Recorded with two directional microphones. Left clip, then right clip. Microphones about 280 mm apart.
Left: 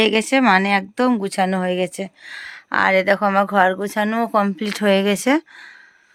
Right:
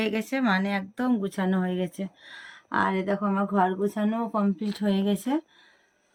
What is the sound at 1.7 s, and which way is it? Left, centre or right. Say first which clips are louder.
Speech: left 9 dB; left.